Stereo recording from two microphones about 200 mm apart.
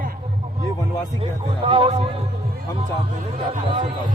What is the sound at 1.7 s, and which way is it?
Speech, 30° right (ahead or behind).